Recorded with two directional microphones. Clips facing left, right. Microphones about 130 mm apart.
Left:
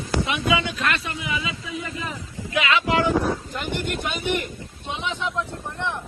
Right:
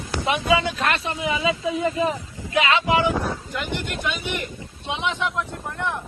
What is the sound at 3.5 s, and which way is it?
Speech, 45° left (ahead or behind).